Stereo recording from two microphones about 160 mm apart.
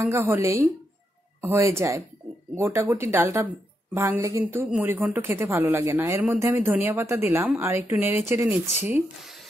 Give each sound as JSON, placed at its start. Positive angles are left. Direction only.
{"t": 0.0, "sound": "speech", "side_deg": -15}